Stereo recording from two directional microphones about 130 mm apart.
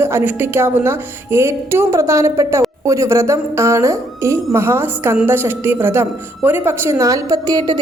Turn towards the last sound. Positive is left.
turn(degrees=-30)  # may be behind; listen again after turning